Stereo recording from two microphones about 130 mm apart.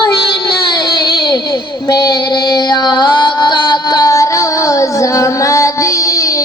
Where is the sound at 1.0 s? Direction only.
40° left (ahead or behind).